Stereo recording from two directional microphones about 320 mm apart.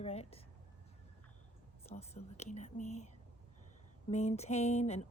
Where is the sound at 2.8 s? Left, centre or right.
Left.